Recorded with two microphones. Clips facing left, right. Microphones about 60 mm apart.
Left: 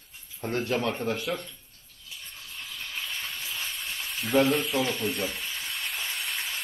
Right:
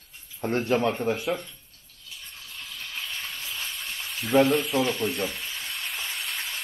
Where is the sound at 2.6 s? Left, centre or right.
Centre.